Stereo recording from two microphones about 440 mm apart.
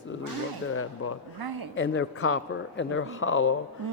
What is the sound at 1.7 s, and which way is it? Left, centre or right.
A woman's voice, left.